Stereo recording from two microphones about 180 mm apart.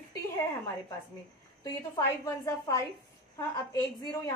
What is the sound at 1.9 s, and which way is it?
A woman's voice, 20° left (ahead or behind).